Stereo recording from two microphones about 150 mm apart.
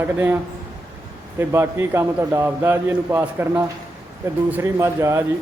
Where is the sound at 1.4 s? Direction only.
15° right (ahead or behind).